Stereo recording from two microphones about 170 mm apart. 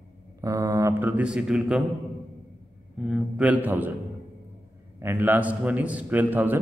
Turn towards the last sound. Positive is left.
turn(degrees=-10)  # may be behind; listen again after turning